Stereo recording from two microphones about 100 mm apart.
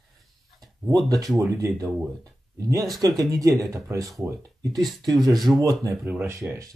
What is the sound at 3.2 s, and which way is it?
Speech, 35° right (ahead or behind).